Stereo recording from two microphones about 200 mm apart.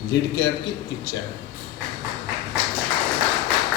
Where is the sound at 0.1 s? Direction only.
60° left (ahead or behind).